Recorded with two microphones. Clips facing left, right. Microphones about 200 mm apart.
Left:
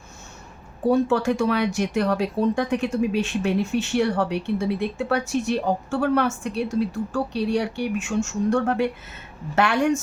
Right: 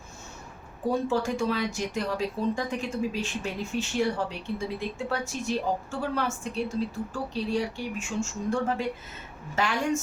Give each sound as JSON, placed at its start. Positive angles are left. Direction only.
{"t": 0.9, "sound": "a woman's voice", "side_deg": 70}